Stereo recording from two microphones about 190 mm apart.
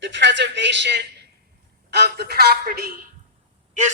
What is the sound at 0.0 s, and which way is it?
A man's voice, 70° right (ahead or behind).